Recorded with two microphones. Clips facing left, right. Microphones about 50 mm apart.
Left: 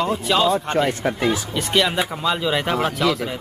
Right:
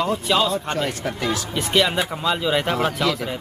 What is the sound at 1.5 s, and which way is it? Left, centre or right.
Speech, centre.